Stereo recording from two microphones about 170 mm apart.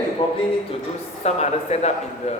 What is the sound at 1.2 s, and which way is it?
Speech, 40° left (ahead or behind).